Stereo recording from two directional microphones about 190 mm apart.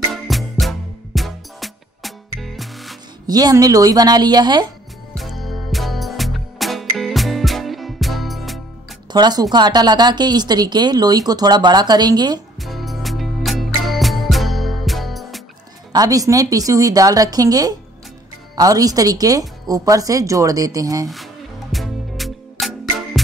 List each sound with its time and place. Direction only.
0.1 s music: centre (ahead or behind)
3.3 s a woman's voice: 20° right (ahead or behind)
5.1 s music: centre (ahead or behind)
9.1 s a woman's voice: 20° right (ahead or behind)
12.5 s music: centre (ahead or behind)
15.9 s a woman's voice: 20° right (ahead or behind)
21.7 s music: centre (ahead or behind)